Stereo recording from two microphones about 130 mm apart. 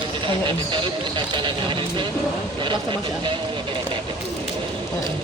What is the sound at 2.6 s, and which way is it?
Speech, 40° right (ahead or behind).